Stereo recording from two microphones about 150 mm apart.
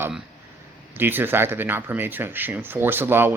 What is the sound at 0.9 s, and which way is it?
Speech, 15° right (ahead or behind).